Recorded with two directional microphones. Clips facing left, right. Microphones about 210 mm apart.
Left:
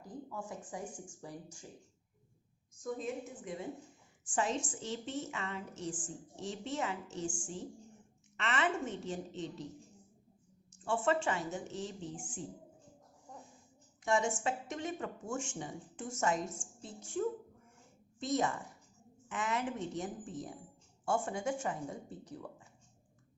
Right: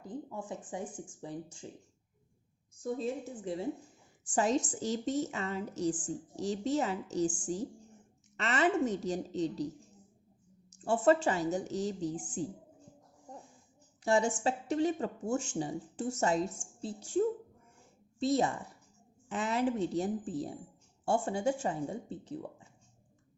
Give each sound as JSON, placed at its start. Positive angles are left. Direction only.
{"t": 0.0, "sound": "speech", "side_deg": -25}
{"t": 2.8, "sound": "a woman's voice", "side_deg": -35}
{"t": 10.7, "sound": "a woman's voice", "side_deg": -40}
{"t": 14.0, "sound": "a woman's voice", "side_deg": -35}